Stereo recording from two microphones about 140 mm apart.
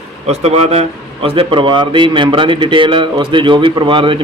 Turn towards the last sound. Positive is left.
turn(degrees=-35)  # may be behind; listen again after turning